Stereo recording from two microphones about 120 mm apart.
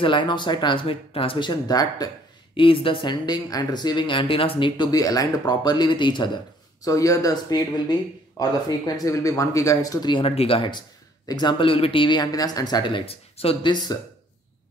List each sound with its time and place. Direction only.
0.0 s speech: 40° left (ahead or behind)
2.5 s speech: 45° left (ahead or behind)
6.8 s speech: 30° left (ahead or behind); by 13.7 s 50° left (ahead or behind)